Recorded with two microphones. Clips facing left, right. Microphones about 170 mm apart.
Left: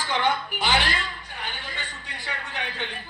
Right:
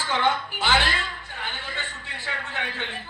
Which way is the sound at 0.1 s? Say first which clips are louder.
Right 1 dB; 15° left (ahead or behind).